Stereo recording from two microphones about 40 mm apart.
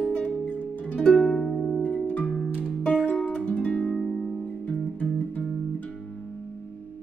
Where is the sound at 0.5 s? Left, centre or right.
Left.